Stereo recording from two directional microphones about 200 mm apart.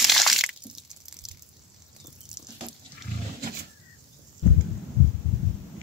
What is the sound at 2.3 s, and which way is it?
Duck, 5° right (ahead or behind).